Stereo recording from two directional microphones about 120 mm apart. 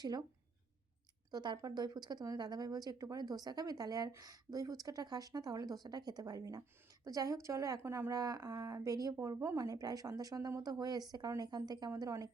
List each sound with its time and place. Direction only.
0.0 s speech: 35° right (ahead or behind)
1.3 s speech: 35° right (ahead or behind)